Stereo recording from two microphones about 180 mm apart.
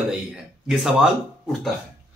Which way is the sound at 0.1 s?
5° right (ahead or behind).